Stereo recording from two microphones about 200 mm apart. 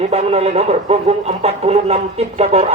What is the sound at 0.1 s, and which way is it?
Speech, 30° right (ahead or behind).